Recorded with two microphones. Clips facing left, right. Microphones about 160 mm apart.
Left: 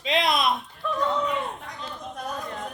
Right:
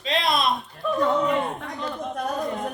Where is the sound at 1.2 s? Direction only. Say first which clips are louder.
Right 5 dB; 55° right (ahead or behind).